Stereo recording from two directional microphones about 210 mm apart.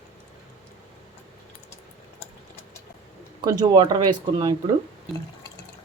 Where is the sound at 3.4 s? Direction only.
20° right (ahead or behind).